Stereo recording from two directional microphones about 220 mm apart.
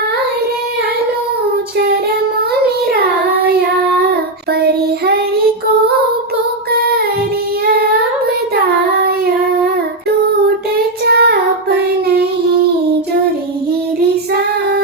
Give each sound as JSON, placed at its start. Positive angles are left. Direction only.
{"t": 4.6, "sound": "child singing", "side_deg": -45}
{"t": 10.8, "sound": "child singing", "side_deg": -45}